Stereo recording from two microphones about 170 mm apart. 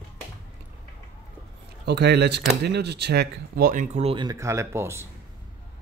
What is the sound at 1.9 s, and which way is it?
Speech, 75° right (ahead or behind).